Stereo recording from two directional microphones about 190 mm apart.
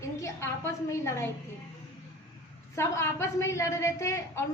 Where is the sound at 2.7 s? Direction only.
15° left (ahead or behind).